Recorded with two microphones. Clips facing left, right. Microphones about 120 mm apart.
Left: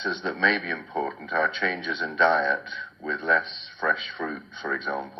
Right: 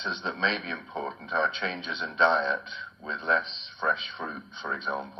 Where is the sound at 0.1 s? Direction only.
55° left (ahead or behind).